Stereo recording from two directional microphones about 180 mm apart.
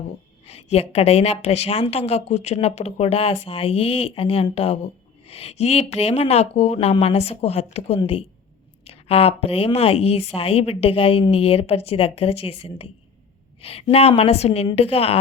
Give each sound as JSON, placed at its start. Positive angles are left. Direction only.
{"t": 0.4, "sound": "a woman's voice", "side_deg": 35}